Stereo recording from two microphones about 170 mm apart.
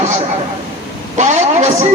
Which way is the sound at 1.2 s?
40° right (ahead or behind).